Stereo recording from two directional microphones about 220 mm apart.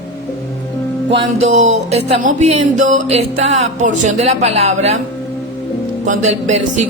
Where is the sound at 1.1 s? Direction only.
30° right (ahead or behind).